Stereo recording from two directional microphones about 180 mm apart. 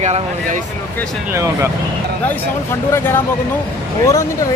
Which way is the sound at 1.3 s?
15° right (ahead or behind).